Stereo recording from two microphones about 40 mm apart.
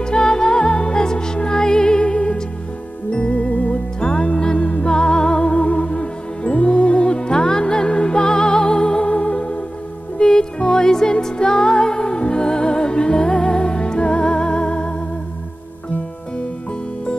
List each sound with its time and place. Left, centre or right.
0.0 s music: centre